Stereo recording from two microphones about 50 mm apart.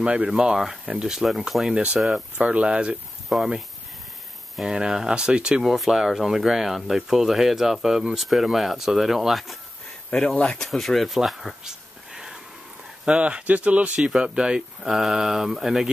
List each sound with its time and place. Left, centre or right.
0.0 s speech: centre
1.1 s speech: centre
2.3 s speech: right
3.3 s speech: centre
4.6 s speech: centre
5.6 s speech: centre
10.1 s speech: centre
11.2 s a sound: centre
13.0 s speech: right